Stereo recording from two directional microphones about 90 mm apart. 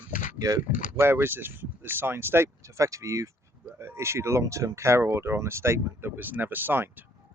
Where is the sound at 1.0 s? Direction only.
25° right (ahead or behind).